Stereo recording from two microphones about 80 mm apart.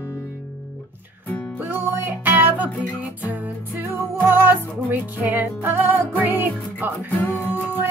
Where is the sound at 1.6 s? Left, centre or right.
Right.